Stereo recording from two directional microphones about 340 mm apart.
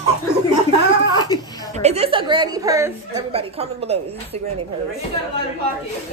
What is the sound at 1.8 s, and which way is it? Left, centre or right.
A woman's voice, centre.